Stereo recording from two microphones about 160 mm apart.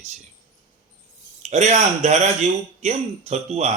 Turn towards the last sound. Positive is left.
turn(degrees=-45)  # may be behind; listen again after turning